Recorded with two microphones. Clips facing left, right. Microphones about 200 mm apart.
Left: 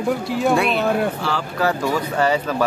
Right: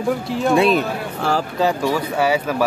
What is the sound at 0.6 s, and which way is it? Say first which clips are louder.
Speech: even; 45° right (ahead or behind).